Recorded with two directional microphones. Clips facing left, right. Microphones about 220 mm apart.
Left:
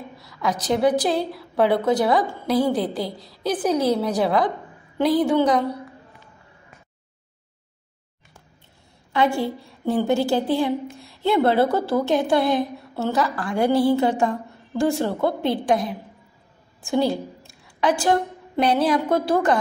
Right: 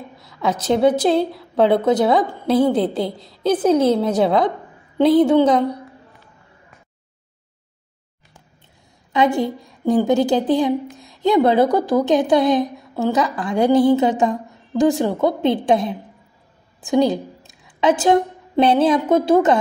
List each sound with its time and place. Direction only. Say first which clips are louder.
0.2 s a woman's voice: right 3 dB; 25° right (ahead or behind)
9.1 s a woman's voice: right 3 dB; 20° right (ahead or behind)